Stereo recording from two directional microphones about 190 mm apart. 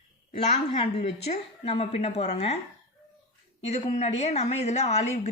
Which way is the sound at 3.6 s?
35° left (ahead or behind).